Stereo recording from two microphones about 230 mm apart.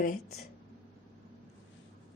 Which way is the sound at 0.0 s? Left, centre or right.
Left.